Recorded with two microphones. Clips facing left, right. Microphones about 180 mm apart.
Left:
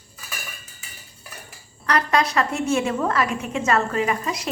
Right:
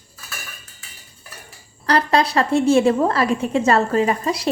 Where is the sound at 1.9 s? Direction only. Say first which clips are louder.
Right 3 dB; 30° right (ahead or behind).